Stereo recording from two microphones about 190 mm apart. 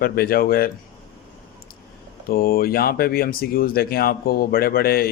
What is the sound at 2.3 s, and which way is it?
Speech, 50° left (ahead or behind).